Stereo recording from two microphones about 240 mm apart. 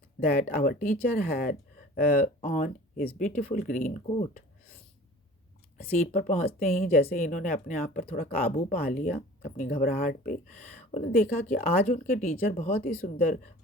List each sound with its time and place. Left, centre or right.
0.4 s speech: left
5.7 s speech: left